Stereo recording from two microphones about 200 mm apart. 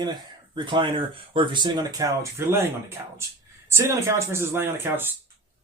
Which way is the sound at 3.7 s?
15° right (ahead or behind).